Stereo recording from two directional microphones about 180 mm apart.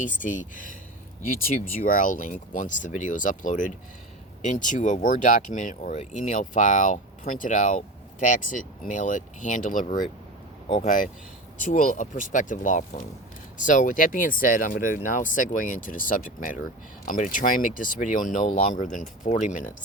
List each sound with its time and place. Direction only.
0.0 s speech: 45° left (ahead or behind)